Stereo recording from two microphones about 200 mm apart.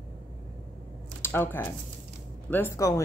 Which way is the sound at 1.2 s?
10° left (ahead or behind).